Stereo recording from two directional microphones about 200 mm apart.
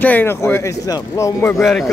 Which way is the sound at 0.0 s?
10° left (ahead or behind).